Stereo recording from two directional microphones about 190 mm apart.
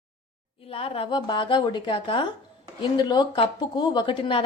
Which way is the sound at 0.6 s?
30° left (ahead or behind).